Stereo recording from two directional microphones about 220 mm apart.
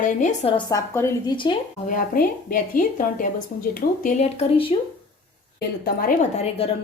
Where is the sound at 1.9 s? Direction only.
40° left (ahead or behind).